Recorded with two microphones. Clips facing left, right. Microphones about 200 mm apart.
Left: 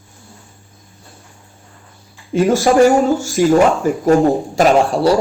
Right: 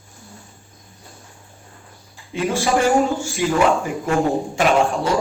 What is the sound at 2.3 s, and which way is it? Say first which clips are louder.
A man's voice: left 8 dB; 45° left (ahead or behind).